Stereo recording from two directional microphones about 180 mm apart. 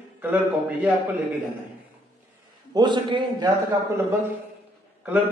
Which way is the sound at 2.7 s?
25° right (ahead or behind).